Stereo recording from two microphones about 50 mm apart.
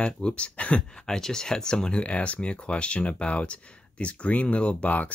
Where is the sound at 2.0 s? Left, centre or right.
Left.